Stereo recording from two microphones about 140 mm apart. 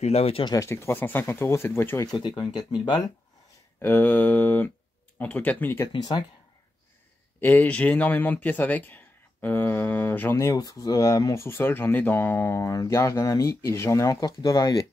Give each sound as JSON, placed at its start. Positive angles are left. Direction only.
{"t": 0.0, "sound": "speech", "side_deg": 45}
{"t": 0.5, "sound": "speech", "side_deg": 20}
{"t": 2.0, "sound": "speech", "side_deg": 30}
{"t": 3.8, "sound": "speech", "side_deg": 10}
{"t": 5.9, "sound": "speech", "side_deg": 30}
{"t": 7.3, "sound": "speech", "side_deg": 15}